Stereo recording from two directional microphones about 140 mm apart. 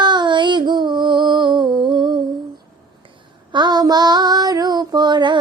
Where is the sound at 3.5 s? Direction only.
30° right (ahead or behind).